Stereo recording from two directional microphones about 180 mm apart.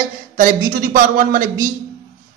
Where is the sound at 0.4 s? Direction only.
50° right (ahead or behind).